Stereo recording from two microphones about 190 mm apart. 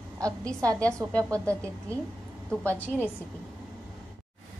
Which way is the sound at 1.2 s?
15° right (ahead or behind).